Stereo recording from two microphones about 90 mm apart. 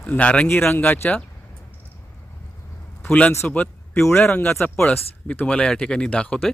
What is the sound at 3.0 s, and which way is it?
Speech, 15° left (ahead or behind).